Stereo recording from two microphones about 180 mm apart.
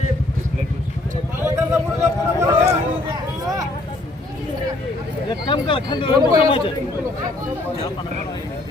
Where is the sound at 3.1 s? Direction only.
20° right (ahead or behind).